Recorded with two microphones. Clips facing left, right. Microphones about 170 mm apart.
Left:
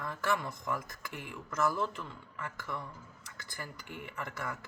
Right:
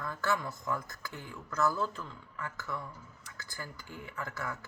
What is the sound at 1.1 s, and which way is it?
Speech, 85° left.